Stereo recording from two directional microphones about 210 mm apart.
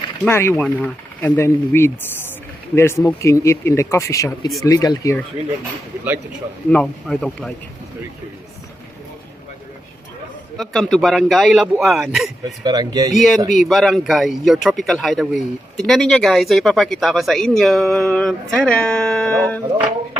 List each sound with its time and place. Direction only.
0.3 s speech: 10° left (ahead or behind)
6.7 s speech: 5° left (ahead or behind)
10.6 s speech: centre (ahead or behind)
12.6 s speech: 20° right (ahead or behind)
13.5 s speech: centre (ahead or behind)